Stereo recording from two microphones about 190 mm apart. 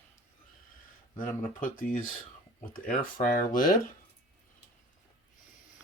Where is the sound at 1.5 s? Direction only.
45° left (ahead or behind).